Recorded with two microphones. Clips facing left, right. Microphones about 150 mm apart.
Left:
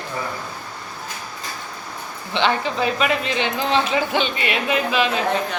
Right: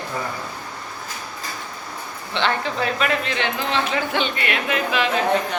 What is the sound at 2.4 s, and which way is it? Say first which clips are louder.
Speech: left 2 dB; 20° left (ahead or behind).